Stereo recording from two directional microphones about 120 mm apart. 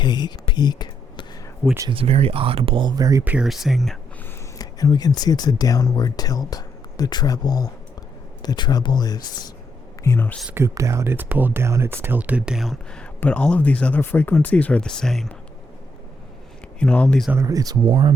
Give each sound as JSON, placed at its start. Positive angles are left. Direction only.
{"t": 0.0, "sound": "a sound", "side_deg": 35}
{"t": 1.9, "sound": "speech", "side_deg": -50}
{"t": 3.2, "sound": "speech", "side_deg": -5}
{"t": 4.5, "sound": "speech", "side_deg": 30}
{"t": 10.0, "sound": "speech", "side_deg": 20}
{"t": 10.5, "sound": "speech", "side_deg": -25}
{"t": 12.9, "sound": "speech", "side_deg": 10}
{"t": 16.8, "sound": "speech", "side_deg": 10}
{"t": 17.3, "sound": "speech", "side_deg": -30}
{"t": 17.8, "sound": "speech", "side_deg": -45}